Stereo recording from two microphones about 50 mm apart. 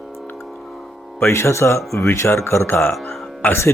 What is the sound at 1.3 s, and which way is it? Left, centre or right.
Speech, left.